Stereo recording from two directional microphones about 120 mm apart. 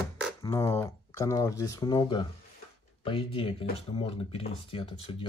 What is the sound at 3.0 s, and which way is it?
Speech, 50° left (ahead or behind).